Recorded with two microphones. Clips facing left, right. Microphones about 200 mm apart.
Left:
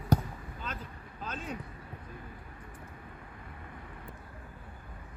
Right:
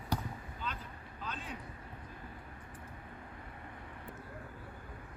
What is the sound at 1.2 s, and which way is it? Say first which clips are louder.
Vehicle: left 5 dB; 45° left (ahead or behind).